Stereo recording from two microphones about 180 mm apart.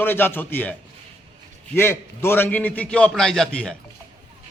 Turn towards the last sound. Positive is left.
turn(degrees=5)  # may be behind; listen again after turning